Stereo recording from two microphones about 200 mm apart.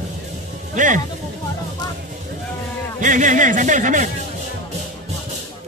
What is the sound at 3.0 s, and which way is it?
Speech, 40° right (ahead or behind).